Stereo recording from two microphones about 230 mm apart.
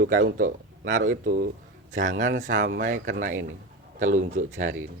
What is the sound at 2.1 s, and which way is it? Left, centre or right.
Speech, right.